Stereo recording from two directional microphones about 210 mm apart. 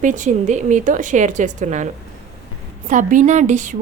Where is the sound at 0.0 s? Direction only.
35° right (ahead or behind).